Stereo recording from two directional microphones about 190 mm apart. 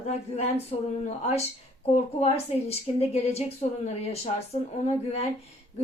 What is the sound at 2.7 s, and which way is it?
Speech, 35° left (ahead or behind).